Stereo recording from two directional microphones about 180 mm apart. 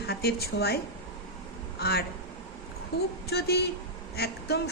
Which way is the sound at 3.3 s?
65° left (ahead or behind).